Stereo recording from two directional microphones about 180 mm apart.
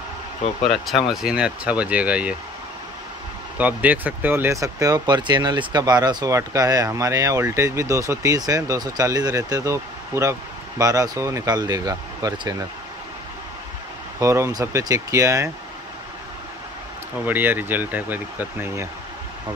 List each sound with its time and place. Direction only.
0.7 s speech: centre (ahead or behind)
3.5 s speech: 10° right (ahead or behind)
14.2 s speech: 15° right (ahead or behind)
17.3 s speech: 10° right (ahead or behind)